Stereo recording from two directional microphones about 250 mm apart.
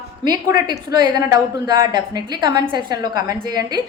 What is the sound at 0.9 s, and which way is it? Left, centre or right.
A woman's voice, centre.